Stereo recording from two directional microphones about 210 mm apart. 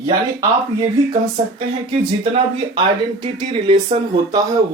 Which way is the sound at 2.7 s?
25° right (ahead or behind).